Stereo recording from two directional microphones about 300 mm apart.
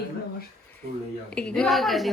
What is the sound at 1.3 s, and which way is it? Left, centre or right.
Speech, centre.